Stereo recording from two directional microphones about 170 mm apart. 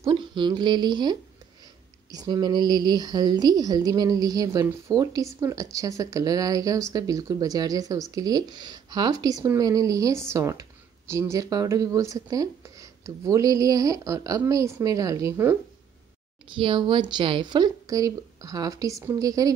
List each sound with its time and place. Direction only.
0.0 s a woman's voice: 30° right (ahead or behind)
16.5 s a woman's voice: 30° right (ahead or behind)